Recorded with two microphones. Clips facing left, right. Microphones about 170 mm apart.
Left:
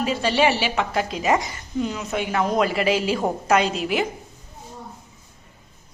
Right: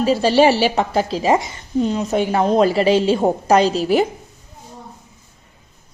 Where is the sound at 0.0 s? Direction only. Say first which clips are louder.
Right 7 dB; 35° right (ahead or behind).